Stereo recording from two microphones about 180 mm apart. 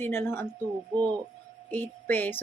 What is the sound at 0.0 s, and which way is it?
Speech, 10° left (ahead or behind).